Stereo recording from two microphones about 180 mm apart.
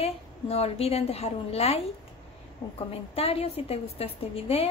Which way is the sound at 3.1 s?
35° left (ahead or behind).